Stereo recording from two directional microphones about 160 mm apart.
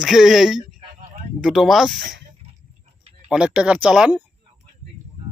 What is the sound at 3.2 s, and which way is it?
Speech, 5° right (ahead or behind).